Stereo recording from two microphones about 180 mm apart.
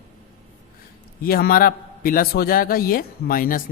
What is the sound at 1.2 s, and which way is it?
A man's voice, 55° left (ahead or behind).